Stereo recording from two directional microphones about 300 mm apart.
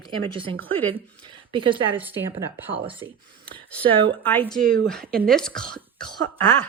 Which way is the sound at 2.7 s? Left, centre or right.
Centre.